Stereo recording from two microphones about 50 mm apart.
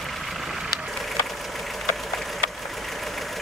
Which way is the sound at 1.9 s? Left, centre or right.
Centre.